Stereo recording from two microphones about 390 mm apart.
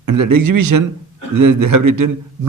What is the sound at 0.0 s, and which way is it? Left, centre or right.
A man's voice, right.